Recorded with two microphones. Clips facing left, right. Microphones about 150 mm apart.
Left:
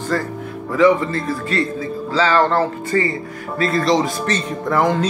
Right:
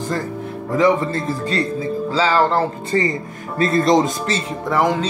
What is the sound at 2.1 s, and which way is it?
Speech, 10° right (ahead or behind).